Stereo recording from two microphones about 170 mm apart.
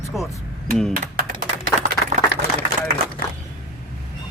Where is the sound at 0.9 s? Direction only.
60° right (ahead or behind).